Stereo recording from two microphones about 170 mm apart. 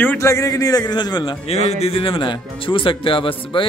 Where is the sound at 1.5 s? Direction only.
40° left (ahead or behind).